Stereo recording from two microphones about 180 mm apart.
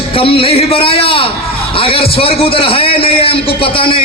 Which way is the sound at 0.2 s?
30° left (ahead or behind).